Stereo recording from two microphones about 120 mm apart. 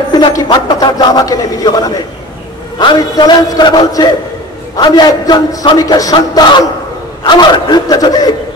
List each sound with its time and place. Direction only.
0.1 s a man's voice: 35° left (ahead or behind)